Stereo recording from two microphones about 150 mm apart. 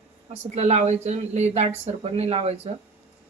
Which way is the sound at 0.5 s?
45° right (ahead or behind).